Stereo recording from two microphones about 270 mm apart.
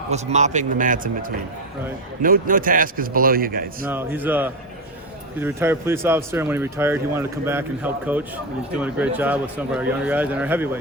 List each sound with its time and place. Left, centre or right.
0.1 s a man's voice: right
2.2 s a man's voice: right
3.8 s a man's voice: centre